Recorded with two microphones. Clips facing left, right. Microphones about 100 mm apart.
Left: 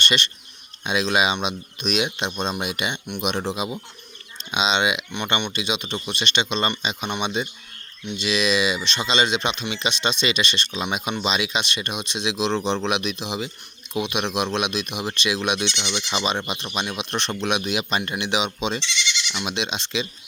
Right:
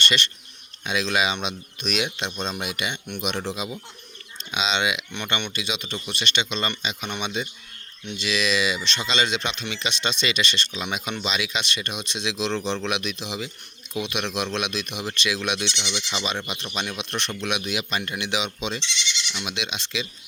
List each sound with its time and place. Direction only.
0.0 s speech: 20° left (ahead or behind)
15.6 s speech: 50° left (ahead or behind)
16.1 s speech: 25° left (ahead or behind)
18.8 s goat: 70° left (ahead or behind)
19.5 s speech: 25° left (ahead or behind)